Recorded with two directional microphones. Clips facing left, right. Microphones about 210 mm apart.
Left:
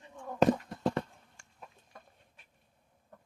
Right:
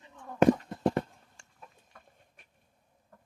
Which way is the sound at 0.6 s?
30° right (ahead or behind).